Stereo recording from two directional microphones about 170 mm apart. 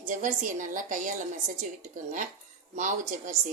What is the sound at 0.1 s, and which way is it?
A woman's voice, 50° right (ahead or behind).